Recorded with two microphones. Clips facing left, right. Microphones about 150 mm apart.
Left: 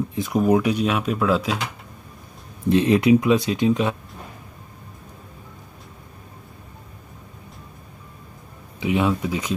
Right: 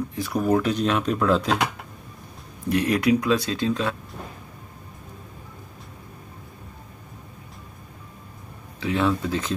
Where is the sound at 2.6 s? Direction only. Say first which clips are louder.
Left 5 dB; 20° left (ahead or behind).